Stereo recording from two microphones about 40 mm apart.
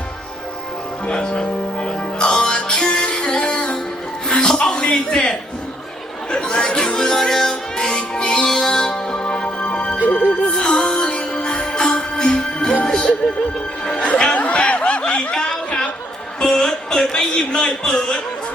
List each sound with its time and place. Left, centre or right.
1.0 s music: left
6.3 s music: centre
8.4 s music: centre; by 10.0 s left
10.4 s music: left
13.9 s speech: left
14.4 s a sound: left
15.4 s chatter: centre
16.4 s music: centre
17.1 s speech: centre